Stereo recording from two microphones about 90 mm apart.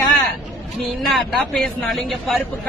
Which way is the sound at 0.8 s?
Centre (ahead or behind).